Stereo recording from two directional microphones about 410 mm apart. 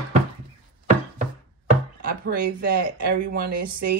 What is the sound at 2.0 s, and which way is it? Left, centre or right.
Speech, right.